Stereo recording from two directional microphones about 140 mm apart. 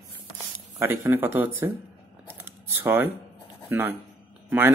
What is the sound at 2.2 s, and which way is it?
Camera, 15° right (ahead or behind).